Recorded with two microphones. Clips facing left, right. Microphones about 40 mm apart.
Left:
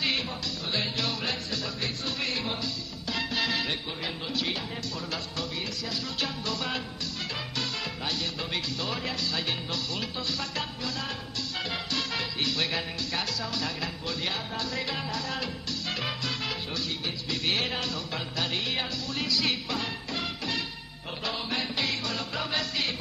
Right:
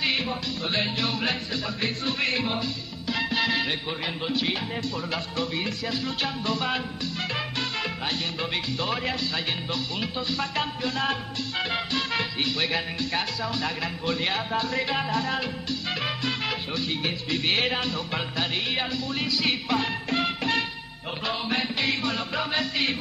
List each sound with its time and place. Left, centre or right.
0.0 s music: right
8.4 s music: right
16.0 s salsa music: right
17.3 s music: right
19.7 s music: right
21.3 s music: right